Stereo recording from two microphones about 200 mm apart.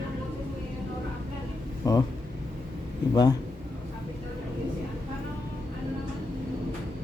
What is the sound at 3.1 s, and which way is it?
Speech, 20° left (ahead or behind).